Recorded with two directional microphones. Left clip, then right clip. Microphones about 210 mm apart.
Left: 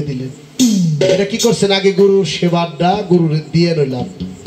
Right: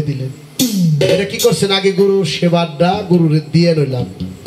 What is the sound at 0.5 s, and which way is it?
Speech, 45° right (ahead or behind).